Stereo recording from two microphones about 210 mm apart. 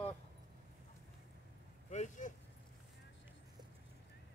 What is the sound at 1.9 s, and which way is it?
Vehicle, 35° left (ahead or behind).